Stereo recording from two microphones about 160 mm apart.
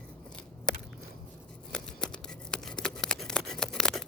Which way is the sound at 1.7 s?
5° left (ahead or behind).